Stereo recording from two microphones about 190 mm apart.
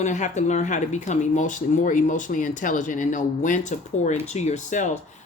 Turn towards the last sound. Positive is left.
turn(degrees=40)  # may be behind; listen again after turning